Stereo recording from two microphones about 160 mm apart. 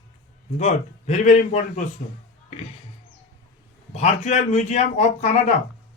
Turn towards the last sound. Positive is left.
turn(degrees=45)  # may be behind; listen again after turning